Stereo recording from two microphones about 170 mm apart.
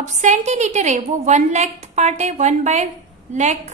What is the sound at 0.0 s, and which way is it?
A woman's voice, 45° right (ahead or behind).